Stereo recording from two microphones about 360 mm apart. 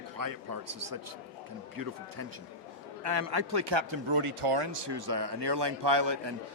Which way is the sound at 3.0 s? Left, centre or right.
Right.